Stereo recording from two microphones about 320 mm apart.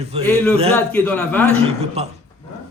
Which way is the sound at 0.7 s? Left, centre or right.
Centre.